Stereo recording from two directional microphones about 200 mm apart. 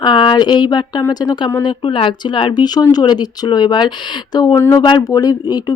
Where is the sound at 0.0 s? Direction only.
20° left (ahead or behind).